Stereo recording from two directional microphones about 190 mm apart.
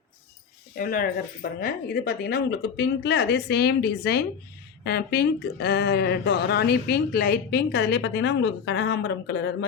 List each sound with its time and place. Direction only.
0.8 s speech: 50° left (ahead or behind)